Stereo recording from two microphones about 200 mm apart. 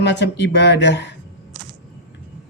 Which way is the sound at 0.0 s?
60° left (ahead or behind).